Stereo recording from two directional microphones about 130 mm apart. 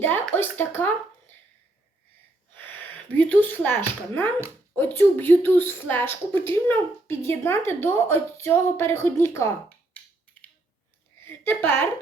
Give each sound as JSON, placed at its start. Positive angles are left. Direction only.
{"t": 0.0, "sound": "speech", "side_deg": 15}
{"t": 2.6, "sound": "a sound", "side_deg": 15}
{"t": 4.7, "sound": "a woman's voice", "side_deg": 15}
{"t": 11.2, "sound": "a woman's voice", "side_deg": 15}